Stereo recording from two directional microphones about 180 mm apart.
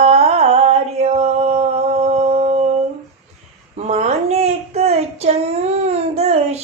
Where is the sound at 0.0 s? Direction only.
35° right (ahead or behind).